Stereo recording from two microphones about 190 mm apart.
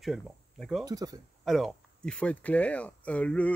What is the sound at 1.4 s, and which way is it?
Speech, centre (ahead or behind).